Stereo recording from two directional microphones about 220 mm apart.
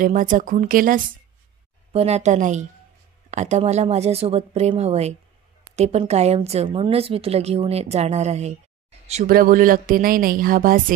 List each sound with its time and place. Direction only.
0.0 s a woman's voice: 35° right (ahead or behind)